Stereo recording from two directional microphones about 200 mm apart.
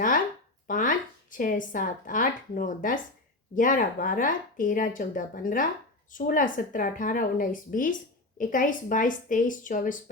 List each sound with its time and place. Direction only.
0.7 s a woman's voice: 40° left (ahead or behind)